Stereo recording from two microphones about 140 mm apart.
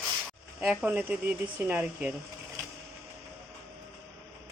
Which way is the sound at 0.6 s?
10° right (ahead or behind).